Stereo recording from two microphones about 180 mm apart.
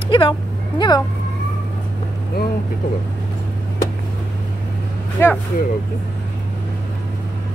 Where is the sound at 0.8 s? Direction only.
20° left (ahead or behind).